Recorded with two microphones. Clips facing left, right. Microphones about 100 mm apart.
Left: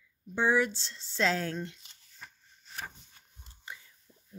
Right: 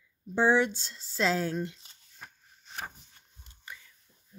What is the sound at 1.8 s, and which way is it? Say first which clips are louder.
Shuffling cards: right 1 dB; 40° right (ahead or behind).